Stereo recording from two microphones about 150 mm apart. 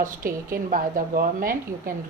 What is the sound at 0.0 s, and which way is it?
A woman's voice, 70° right (ahead or behind).